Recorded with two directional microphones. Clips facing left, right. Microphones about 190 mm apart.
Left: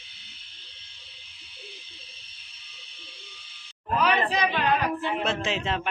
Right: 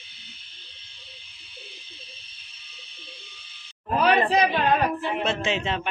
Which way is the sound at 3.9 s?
35° right (ahead or behind).